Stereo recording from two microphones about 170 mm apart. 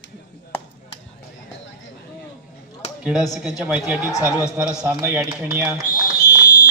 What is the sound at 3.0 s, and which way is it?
A man's voice, centre (ahead or behind).